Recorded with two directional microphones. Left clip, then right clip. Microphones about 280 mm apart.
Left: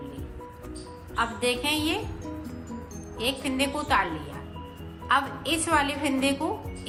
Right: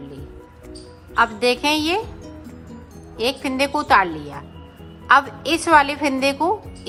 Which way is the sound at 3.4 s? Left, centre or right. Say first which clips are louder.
Right 10 dB; centre.